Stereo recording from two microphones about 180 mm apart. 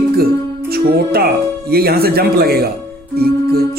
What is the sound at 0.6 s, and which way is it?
Music, 60° right (ahead or behind).